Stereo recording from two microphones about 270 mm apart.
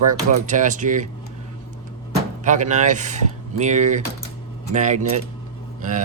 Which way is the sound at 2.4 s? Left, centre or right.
Right.